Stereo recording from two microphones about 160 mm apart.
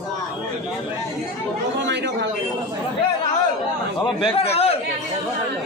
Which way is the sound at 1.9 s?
90° right.